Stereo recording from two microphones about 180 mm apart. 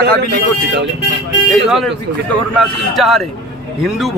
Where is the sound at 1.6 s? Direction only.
Centre (ahead or behind).